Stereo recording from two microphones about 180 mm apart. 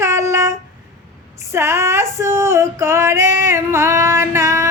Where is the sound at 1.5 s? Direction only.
15° right (ahead or behind).